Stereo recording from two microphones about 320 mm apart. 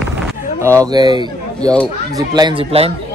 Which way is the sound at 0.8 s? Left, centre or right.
Centre.